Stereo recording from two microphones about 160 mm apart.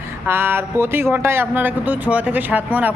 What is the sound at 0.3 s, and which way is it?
Speech, 15° right (ahead or behind).